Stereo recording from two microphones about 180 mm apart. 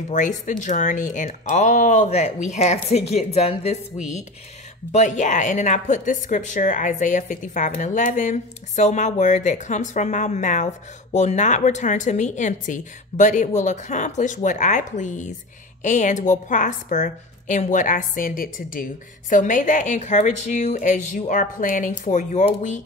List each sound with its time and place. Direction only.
0.1 s a woman's voice: 45° left (ahead or behind)